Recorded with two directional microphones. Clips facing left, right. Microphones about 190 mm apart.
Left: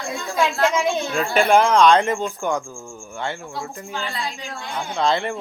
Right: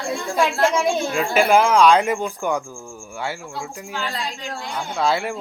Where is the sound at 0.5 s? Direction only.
30° right (ahead or behind).